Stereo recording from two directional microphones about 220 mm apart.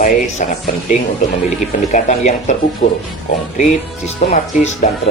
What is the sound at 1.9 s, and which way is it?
Speech, 30° left (ahead or behind).